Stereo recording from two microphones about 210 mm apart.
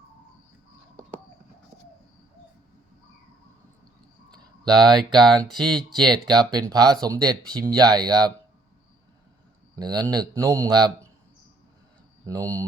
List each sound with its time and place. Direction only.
4.3 s a sound: 20° right (ahead or behind)
5.2 s speech: centre (ahead or behind)
6.1 s a man's voice: 20° right (ahead or behind)
9.7 s a man's voice: 20° right (ahead or behind)
12.2 s speech: 15° right (ahead or behind)